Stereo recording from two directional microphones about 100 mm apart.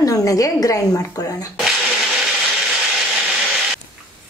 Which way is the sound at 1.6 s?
Centre (ahead or behind).